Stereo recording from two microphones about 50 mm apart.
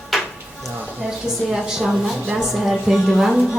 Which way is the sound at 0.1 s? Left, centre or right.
Centre.